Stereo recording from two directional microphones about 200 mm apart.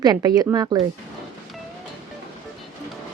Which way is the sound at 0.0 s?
20° right (ahead or behind).